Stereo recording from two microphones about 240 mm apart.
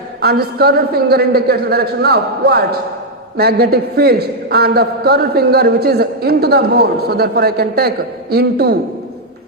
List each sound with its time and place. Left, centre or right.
0.2 s a man's voice: right